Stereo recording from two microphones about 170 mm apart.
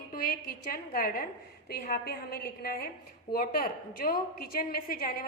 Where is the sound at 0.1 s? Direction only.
60° left (ahead or behind).